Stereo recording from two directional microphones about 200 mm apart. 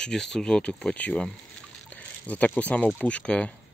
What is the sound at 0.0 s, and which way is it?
Speech, 5° left (ahead or behind).